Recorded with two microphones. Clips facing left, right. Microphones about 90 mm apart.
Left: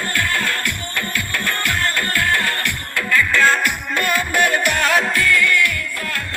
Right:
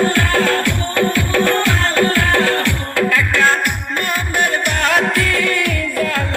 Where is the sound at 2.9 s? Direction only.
65° right (ahead or behind).